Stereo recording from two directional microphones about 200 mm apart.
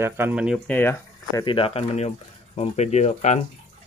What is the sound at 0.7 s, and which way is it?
Speech, 10° left (ahead or behind).